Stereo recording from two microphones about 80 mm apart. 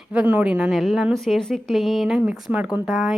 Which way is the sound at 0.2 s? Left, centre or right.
Centre.